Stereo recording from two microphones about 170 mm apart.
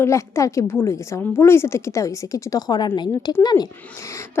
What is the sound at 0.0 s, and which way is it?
A woman's voice, 15° left (ahead or behind).